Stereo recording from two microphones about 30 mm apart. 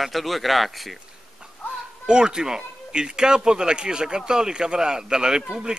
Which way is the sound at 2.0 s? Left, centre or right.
Right.